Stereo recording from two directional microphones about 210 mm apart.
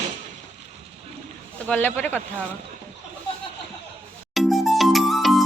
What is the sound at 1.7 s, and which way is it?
Speech, 5° left (ahead or behind).